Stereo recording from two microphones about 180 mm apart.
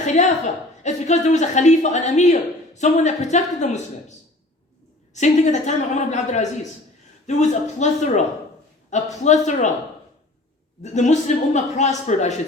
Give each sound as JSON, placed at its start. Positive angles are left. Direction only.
{"t": 0.0, "sound": "speech", "side_deg": 40}
{"t": 5.1, "sound": "speech", "side_deg": 40}
{"t": 10.9, "sound": "speech", "side_deg": 40}